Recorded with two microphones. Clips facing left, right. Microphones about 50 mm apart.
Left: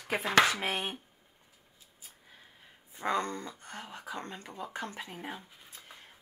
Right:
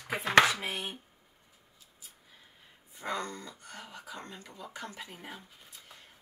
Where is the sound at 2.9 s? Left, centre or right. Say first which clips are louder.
Left 4 dB; left.